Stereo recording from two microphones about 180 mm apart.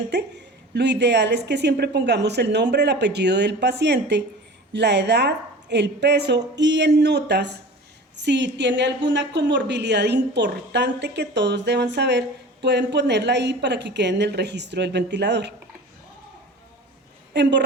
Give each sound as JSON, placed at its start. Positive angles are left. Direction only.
{"t": 0.1, "sound": "a woman's voice", "side_deg": -70}
{"t": 17.3, "sound": "a woman's voice", "side_deg": -70}